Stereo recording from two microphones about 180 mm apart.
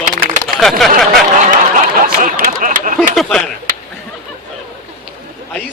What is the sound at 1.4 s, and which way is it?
Snicker, 45° right (ahead or behind).